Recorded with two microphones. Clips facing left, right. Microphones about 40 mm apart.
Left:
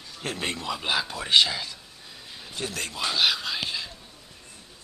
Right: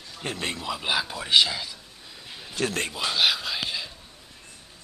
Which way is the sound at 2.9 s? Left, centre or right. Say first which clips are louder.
Left 3 dB; centre.